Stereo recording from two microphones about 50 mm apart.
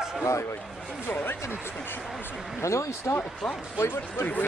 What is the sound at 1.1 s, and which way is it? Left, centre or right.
Speech, left.